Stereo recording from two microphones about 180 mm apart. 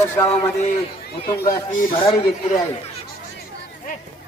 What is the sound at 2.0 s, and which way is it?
Speech, 30° left (ahead or behind).